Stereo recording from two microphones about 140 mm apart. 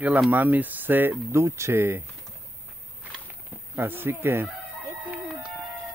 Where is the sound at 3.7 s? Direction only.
15° right (ahead or behind).